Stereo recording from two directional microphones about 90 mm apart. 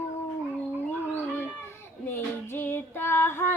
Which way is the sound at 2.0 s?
25° left (ahead or behind).